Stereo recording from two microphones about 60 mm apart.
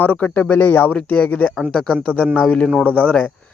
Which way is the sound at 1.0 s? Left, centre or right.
Left.